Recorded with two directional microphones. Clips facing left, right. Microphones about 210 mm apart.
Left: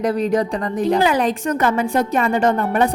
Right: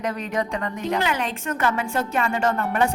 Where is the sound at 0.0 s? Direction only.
35° left (ahead or behind).